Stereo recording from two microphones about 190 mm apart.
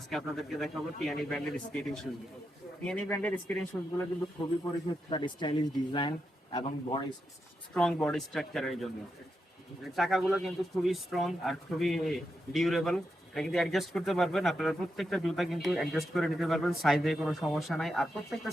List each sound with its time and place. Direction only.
0.1 s speech: centre (ahead or behind)
5.1 s speech: 25° left (ahead or behind)
7.7 s speech: 5° left (ahead or behind)
9.9 s speech: centre (ahead or behind)